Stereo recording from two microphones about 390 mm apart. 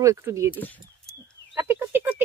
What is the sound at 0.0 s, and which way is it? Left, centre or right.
Speech, centre.